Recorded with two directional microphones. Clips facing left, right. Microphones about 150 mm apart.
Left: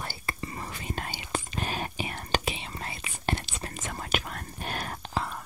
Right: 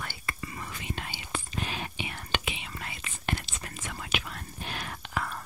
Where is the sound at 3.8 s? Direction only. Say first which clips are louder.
Left 3 dB; 45° left (ahead or behind).